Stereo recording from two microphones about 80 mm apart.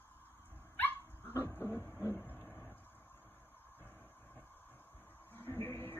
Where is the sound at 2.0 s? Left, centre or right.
Left.